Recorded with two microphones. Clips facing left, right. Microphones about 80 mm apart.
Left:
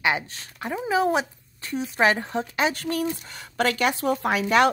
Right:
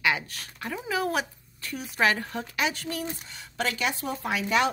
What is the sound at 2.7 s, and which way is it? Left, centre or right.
Speech, left.